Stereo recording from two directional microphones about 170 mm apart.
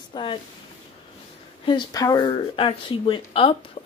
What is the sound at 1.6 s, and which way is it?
Speech, 25° left (ahead or behind).